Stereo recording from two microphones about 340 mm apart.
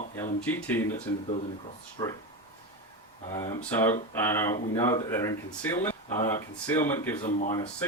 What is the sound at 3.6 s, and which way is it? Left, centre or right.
Speech, centre.